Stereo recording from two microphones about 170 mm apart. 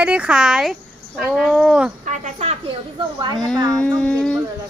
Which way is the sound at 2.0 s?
40° right (ahead or behind).